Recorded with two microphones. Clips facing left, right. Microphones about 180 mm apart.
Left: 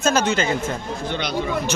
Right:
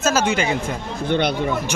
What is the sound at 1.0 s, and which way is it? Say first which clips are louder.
Speech: right 9 dB; 55° right (ahead or behind).